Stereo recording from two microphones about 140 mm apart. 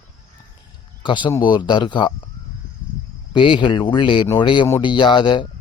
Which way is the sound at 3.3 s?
35° left (ahead or behind).